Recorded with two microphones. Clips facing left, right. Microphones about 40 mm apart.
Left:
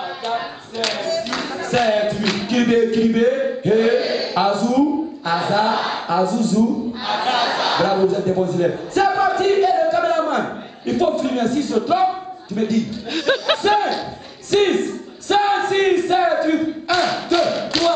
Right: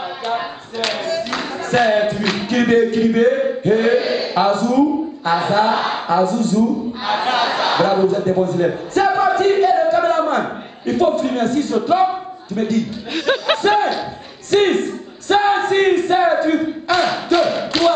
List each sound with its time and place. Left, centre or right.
0.8 s music: centre
11.9 s speech: centre